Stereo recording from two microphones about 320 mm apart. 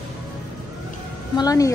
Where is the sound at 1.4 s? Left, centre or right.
Centre.